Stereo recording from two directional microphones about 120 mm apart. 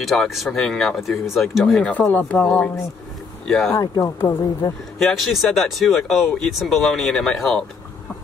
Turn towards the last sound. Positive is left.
turn(degrees=5)  # may be behind; listen again after turning